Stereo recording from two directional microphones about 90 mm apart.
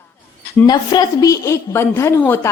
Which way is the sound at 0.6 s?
50° left (ahead or behind).